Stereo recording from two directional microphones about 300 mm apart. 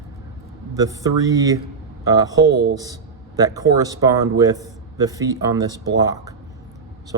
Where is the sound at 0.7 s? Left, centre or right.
Centre.